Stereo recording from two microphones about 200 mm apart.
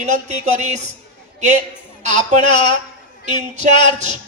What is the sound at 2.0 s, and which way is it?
A woman's voice, 35° right (ahead or behind).